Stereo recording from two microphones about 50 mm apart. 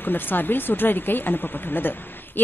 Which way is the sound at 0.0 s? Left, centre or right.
Left.